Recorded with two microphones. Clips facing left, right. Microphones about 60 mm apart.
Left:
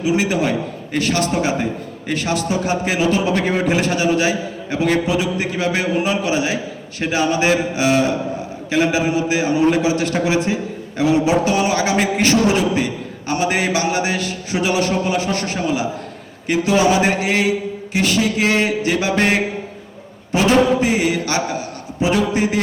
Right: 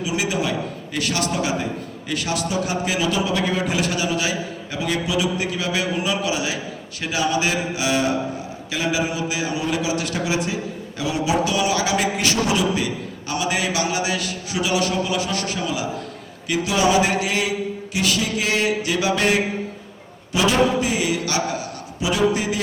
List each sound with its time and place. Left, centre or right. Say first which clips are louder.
0.0 s a man's voice: left 5 dB; left
20.3 s a sound: left 4 dB; left
22.0 s a man's voice: left 3 dB; left